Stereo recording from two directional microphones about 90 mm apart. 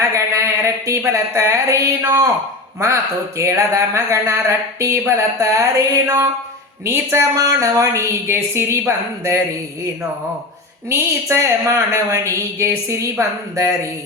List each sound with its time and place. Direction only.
0.0 s a sound: 35° right (ahead or behind)
2.0 s a woman's voice: 30° right (ahead or behind)
7.3 s speech: 40° right (ahead or behind)
10.8 s speech: 30° right (ahead or behind)